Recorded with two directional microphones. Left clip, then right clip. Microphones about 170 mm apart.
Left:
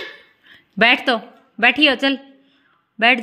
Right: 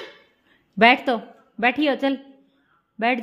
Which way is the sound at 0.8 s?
5° right (ahead or behind).